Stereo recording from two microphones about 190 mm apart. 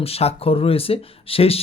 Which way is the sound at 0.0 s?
30° left (ahead or behind).